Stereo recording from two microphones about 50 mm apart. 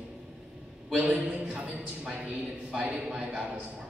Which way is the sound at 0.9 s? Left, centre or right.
Right.